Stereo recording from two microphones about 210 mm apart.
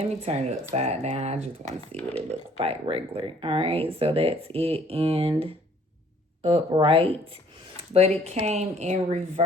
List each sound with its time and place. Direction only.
0.0 s speech: 30° right (ahead or behind)
1.9 s speech: 5° left (ahead or behind)
2.6 s speech: 30° right (ahead or behind)
6.7 s speech: 25° right (ahead or behind)